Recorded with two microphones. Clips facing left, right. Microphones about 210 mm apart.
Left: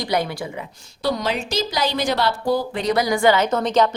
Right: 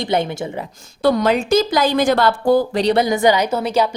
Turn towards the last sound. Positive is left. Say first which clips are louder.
# even
turn(degrees=-10)  # may be behind; listen again after turning